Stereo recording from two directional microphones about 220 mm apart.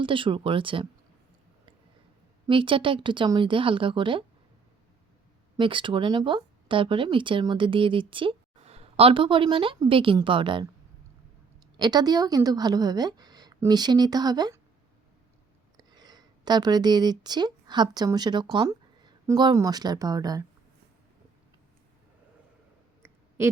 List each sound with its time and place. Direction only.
0.0 s speech: 25° right (ahead or behind)
2.5 s speech: 25° right (ahead or behind)
5.5 s speech: 20° right (ahead or behind)
11.8 s a woman's voice: 20° right (ahead or behind)
15.8 s speech: 20° right (ahead or behind)